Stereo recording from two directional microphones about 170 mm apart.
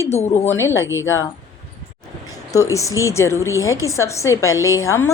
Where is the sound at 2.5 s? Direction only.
20° left (ahead or behind).